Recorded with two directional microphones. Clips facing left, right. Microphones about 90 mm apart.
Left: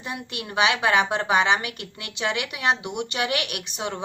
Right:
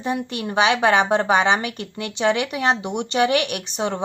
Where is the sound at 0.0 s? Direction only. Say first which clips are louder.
Right 8 dB; 35° right (ahead or behind).